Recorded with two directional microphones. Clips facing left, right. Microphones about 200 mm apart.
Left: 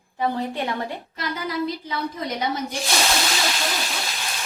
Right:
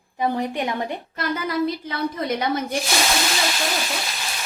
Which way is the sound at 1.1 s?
55° right (ahead or behind).